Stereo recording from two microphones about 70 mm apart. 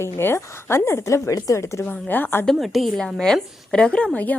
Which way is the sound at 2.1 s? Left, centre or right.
Left.